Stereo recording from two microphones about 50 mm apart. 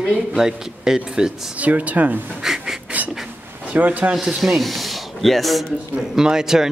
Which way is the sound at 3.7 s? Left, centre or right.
Right.